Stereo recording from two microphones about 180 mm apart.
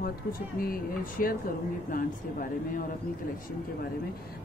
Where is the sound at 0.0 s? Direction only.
55° left (ahead or behind).